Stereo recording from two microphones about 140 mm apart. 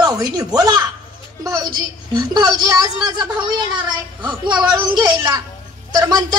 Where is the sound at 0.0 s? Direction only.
30° right (ahead or behind).